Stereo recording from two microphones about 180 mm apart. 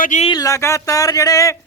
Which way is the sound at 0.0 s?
45° left (ahead or behind).